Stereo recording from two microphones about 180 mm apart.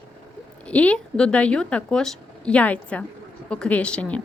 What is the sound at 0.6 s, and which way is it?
Speech, 5° left (ahead or behind).